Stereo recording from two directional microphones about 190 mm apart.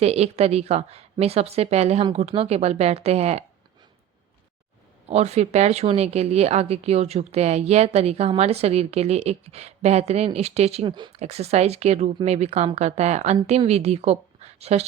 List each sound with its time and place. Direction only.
0.0 s speech: 35° right (ahead or behind)
5.0 s speech: 35° right (ahead or behind)